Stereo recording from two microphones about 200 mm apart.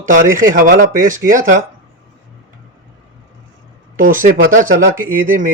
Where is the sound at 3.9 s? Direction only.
45° right (ahead or behind).